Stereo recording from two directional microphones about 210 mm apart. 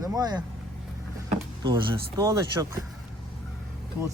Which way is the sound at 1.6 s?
20° right (ahead or behind).